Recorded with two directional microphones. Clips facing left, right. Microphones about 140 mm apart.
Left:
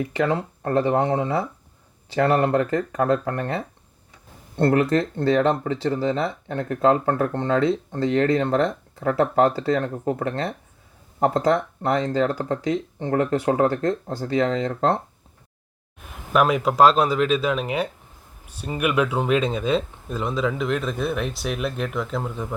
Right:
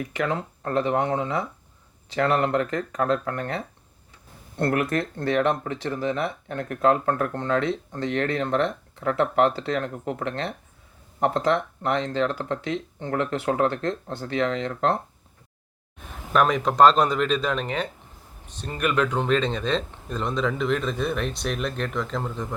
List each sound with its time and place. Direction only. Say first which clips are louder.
0.0 s speech: left 4 dB; 30° left (ahead or behind)
16.3 s speech: left 2 dB; 5° left (ahead or behind)